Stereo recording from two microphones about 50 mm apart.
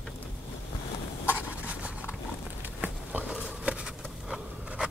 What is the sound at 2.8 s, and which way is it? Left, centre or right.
Patter, right.